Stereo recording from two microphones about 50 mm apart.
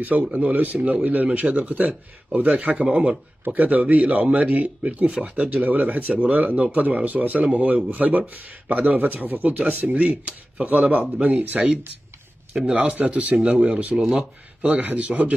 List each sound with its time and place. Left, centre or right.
0.3 s speech: right
6.0 s speech: centre
12.7 s speech: right
14.7 s speech: right